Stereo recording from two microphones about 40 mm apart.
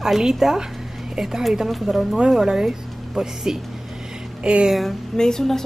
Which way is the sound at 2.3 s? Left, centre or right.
Centre.